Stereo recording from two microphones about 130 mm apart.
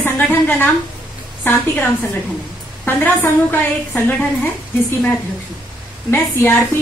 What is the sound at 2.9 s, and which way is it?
A woman's voice, 15° left (ahead or behind).